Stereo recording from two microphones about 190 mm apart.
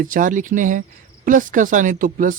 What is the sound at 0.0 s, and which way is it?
Speech, 45° right (ahead or behind).